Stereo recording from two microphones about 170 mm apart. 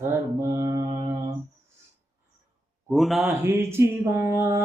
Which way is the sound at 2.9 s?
Centre (ahead or behind).